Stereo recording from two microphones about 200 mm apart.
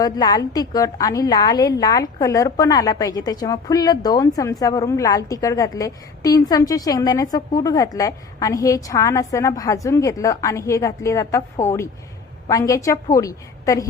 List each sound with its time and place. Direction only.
0.0 s a woman's voice: 20° left (ahead or behind)